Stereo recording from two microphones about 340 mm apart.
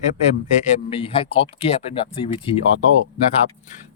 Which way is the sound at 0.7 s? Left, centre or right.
Centre.